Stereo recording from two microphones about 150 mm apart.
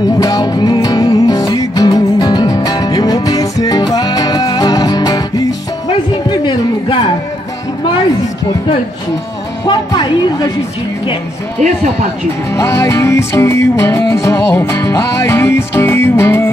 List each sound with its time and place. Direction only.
0.2 s music: 25° left (ahead or behind)
9.7 s a woman's voice: 30° left (ahead or behind)
12.5 s music: 20° left (ahead or behind)